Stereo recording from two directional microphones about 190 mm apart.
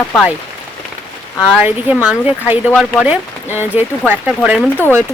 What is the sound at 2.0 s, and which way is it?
Speech, 5° right (ahead or behind).